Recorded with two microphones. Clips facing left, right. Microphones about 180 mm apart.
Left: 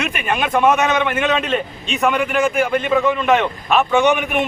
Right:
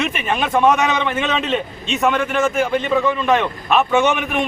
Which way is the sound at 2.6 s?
Centre (ahead or behind).